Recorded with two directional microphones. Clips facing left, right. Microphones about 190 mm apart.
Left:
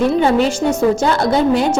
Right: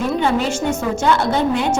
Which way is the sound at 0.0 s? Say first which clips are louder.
Left 5 dB; 35° left (ahead or behind).